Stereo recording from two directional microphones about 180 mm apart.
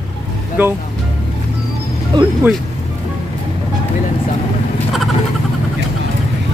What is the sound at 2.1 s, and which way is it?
Speech, 25° right (ahead or behind).